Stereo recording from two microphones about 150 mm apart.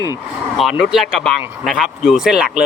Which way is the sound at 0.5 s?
Centre (ahead or behind).